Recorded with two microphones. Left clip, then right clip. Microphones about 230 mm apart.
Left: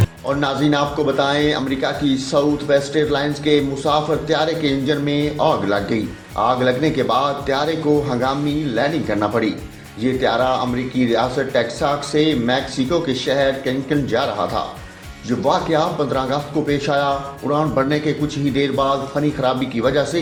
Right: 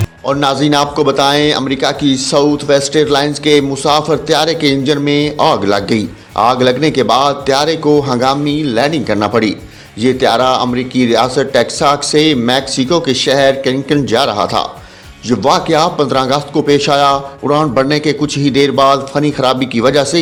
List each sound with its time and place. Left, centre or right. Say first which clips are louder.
0.3 s a man's voice: right 7 dB; right